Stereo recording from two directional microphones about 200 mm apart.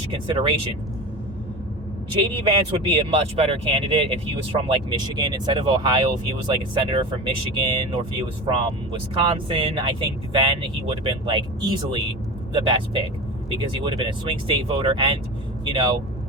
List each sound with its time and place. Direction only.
0.1 s speech: 25° right (ahead or behind)
2.3 s speech: 30° right (ahead or behind)